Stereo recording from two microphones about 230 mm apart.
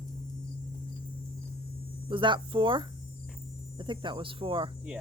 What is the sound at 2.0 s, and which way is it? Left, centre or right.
Speech, right.